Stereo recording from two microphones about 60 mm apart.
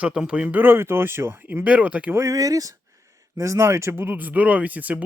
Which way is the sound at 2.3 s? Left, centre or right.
Right.